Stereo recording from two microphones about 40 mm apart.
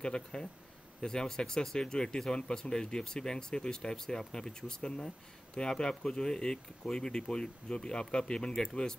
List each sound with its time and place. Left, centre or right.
0.0 s speech: centre